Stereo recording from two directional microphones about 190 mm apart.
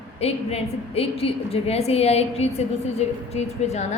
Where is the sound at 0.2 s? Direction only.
30° left (ahead or behind).